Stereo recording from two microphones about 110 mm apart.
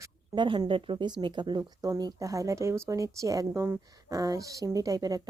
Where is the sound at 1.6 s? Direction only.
30° right (ahead or behind).